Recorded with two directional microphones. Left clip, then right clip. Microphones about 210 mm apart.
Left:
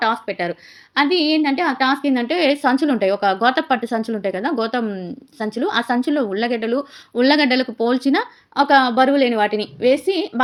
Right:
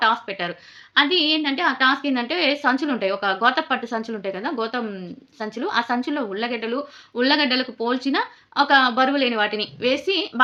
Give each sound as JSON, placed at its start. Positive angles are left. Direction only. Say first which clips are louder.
{"t": 0.0, "sound": "a woman's voice", "louder": "left 1 dB", "side_deg": 15}